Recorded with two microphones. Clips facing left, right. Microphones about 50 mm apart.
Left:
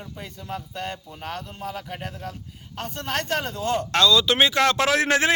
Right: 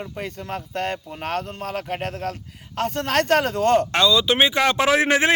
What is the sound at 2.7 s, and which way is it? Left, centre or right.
Speech, right.